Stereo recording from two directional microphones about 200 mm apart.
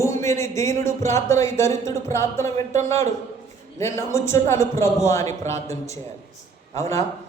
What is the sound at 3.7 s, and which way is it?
Speech, 15° left (ahead or behind).